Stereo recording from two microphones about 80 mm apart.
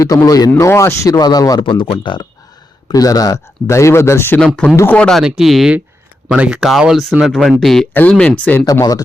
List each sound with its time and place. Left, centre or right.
0.0 s speech: left
0.6 s speech: left
1.2 s speech: left
1.6 s speech: left
2.9 s speech: left
4.4 s speech: centre
5.2 s speech: centre
6.2 s speech: centre
6.6 s speech: centre
8.4 s speech: left
8.6 s speech: left